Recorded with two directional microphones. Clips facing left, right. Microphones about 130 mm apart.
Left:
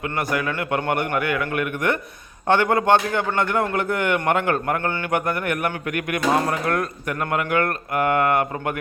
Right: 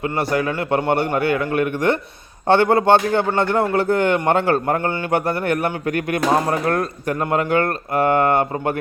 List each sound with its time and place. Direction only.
0.0 s a man's voice: 30° right (ahead or behind)